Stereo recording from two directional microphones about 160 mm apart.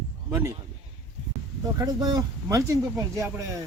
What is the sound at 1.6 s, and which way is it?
Speech, 25° right (ahead or behind).